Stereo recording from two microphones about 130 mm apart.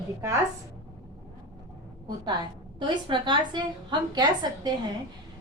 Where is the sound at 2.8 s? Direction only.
35° right (ahead or behind).